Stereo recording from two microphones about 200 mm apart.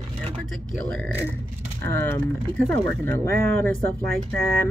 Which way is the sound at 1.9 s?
10° left (ahead or behind).